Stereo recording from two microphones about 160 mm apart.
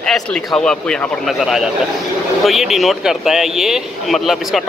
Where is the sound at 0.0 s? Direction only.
5° left (ahead or behind).